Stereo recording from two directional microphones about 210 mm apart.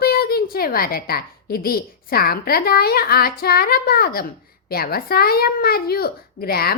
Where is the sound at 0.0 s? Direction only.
45° left (ahead or behind).